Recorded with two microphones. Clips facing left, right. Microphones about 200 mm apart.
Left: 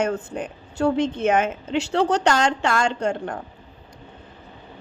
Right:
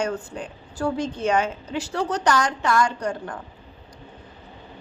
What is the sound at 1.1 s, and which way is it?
Speech, 20° left (ahead or behind).